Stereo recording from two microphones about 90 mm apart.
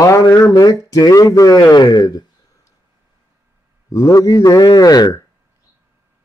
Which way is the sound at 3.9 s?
35° left (ahead or behind).